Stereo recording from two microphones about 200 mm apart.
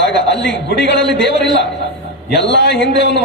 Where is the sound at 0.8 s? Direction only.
60° left (ahead or behind).